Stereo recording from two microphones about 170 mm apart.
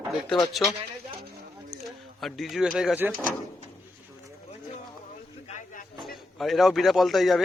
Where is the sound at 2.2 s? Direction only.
Centre (ahead or behind).